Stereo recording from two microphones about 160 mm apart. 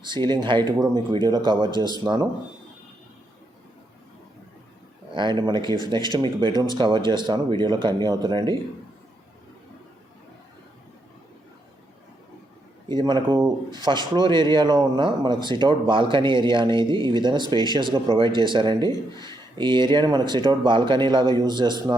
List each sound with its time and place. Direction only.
0.0 s speech: 30° right (ahead or behind)
5.1 s speech: 30° right (ahead or behind)
12.9 s speech: 25° right (ahead or behind)